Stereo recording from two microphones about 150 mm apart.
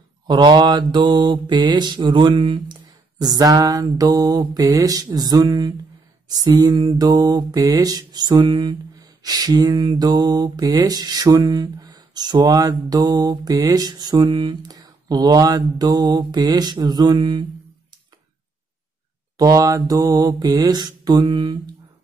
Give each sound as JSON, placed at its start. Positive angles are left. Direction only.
{"t": 0.3, "sound": "mantra", "side_deg": -30}
{"t": 19.3, "sound": "mantra", "side_deg": -25}